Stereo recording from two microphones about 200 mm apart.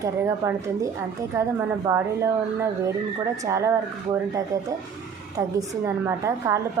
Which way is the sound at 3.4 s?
15° right (ahead or behind).